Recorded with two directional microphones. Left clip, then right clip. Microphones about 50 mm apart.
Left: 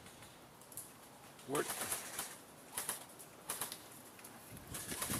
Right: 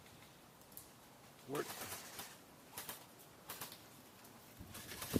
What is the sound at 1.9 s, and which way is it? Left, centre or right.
Bird flight, centre.